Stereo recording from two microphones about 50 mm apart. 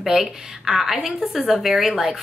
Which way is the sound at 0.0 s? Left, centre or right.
Centre.